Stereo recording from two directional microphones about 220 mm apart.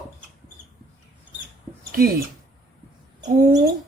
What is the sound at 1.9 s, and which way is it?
Speech, 40° right (ahead or behind).